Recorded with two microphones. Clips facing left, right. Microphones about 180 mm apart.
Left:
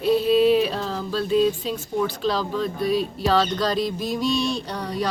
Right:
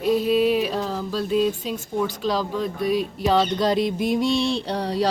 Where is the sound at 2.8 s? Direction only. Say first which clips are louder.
Right 1 dB; 20° right (ahead or behind).